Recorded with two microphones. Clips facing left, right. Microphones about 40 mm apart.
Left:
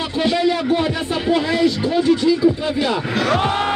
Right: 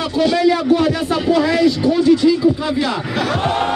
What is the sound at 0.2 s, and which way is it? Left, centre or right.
Speech, left.